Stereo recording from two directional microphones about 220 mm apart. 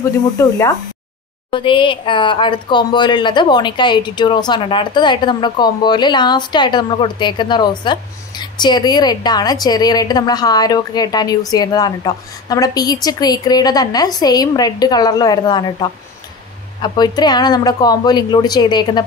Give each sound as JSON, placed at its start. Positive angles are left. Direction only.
{"t": 0.4, "sound": "a woman's voice", "side_deg": 15}